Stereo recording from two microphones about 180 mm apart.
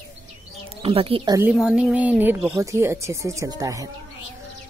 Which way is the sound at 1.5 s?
5° right (ahead or behind).